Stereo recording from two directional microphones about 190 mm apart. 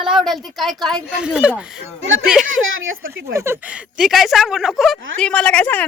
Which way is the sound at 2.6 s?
90° right.